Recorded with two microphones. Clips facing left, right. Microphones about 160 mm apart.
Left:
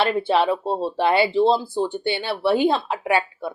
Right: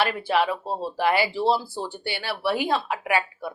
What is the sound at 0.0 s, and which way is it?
Speech, 25° left (ahead or behind).